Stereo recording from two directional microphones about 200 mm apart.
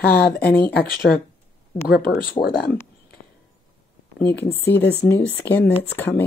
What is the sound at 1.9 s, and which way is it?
Speech, 45° left (ahead or behind).